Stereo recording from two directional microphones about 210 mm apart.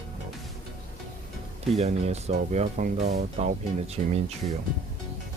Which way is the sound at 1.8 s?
30° right (ahead or behind).